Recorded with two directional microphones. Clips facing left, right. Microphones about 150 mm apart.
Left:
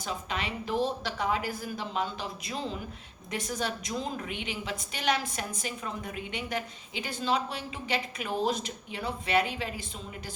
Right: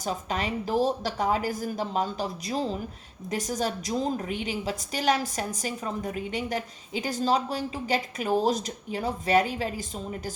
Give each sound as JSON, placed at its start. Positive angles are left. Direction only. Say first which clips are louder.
{"t": 0.0, "sound": "a woman's voice", "louder": "right 5 dB", "side_deg": -40}